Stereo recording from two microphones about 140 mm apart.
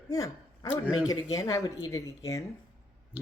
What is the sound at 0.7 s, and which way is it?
Speech, 5° right (ahead or behind).